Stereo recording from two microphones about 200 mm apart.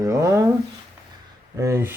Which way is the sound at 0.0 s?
15° right (ahead or behind).